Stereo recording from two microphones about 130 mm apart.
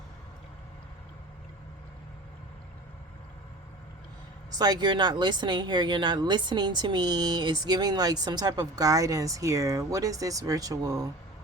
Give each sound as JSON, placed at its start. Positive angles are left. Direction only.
{"t": 4.5, "sound": "speech", "side_deg": -30}